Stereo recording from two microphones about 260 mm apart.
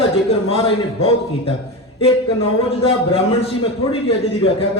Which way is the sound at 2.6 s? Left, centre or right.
Left.